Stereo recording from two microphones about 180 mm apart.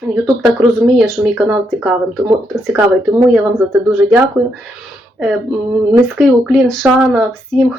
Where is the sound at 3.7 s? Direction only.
5° right (ahead or behind).